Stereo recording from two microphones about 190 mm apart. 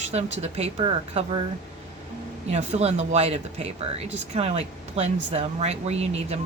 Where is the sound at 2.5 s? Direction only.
35° right (ahead or behind).